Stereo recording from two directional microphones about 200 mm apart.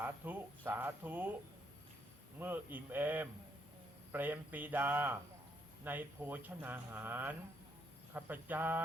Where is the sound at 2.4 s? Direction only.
10° right (ahead or behind).